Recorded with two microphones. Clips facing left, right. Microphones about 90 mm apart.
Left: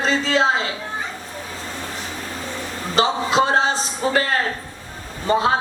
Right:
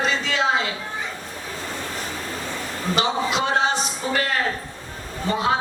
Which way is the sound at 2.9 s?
30° left (ahead or behind).